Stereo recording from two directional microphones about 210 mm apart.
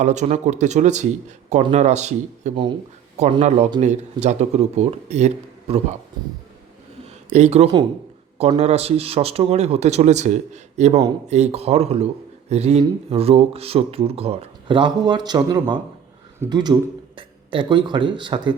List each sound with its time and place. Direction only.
0.0 s speech: 35° right (ahead or behind)
7.3 s speech: 35° right (ahead or behind)